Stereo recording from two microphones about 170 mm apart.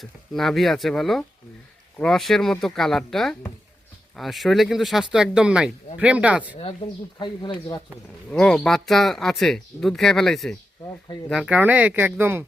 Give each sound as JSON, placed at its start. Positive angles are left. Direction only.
{"t": 0.0, "sound": "speech", "side_deg": 0}
{"t": 7.2, "sound": "speech", "side_deg": 25}
{"t": 8.3, "sound": "speech", "side_deg": 5}